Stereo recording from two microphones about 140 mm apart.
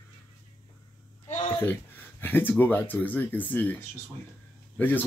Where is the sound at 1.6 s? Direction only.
15° left (ahead or behind).